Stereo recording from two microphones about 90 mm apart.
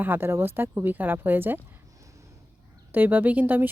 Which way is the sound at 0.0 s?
25° right (ahead or behind).